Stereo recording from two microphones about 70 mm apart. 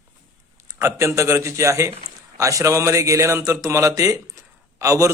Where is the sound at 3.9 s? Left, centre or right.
Right.